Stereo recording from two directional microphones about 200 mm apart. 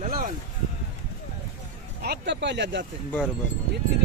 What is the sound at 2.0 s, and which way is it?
Speech, 55° right (ahead or behind).